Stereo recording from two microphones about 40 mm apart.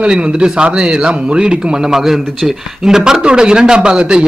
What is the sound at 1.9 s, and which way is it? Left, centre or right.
A man's voice, centre.